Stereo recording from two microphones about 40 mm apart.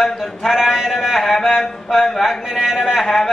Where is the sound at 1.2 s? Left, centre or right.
Centre.